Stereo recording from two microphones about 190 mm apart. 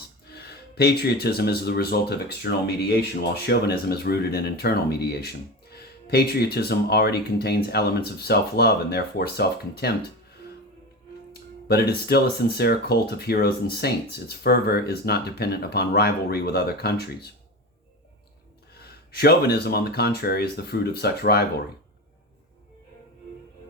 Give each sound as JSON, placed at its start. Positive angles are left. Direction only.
{"t": 0.3, "sound": "speech", "side_deg": 55}
{"t": 11.7, "sound": "speech", "side_deg": 55}
{"t": 18.8, "sound": "speech", "side_deg": 55}